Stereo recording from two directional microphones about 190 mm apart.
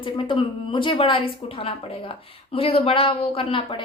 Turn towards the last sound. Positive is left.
turn(degrees=25)  # may be behind; listen again after turning